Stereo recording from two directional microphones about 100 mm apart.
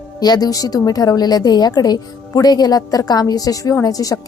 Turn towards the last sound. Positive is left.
turn(degrees=35)  # may be behind; listen again after turning